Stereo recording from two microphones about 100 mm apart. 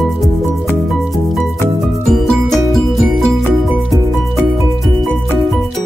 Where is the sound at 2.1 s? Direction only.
5° left (ahead or behind).